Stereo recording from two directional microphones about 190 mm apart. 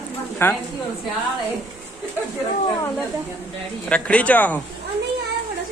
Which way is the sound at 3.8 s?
5° left (ahead or behind).